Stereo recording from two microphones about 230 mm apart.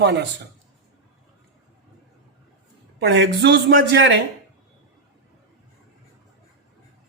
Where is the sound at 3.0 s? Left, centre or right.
Right.